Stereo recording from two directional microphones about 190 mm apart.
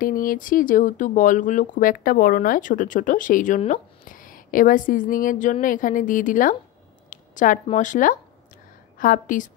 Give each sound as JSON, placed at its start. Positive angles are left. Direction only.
{"t": 0.0, "sound": "a woman's voice", "side_deg": 45}